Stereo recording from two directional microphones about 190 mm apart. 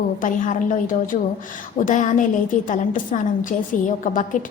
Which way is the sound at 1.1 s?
40° left (ahead or behind).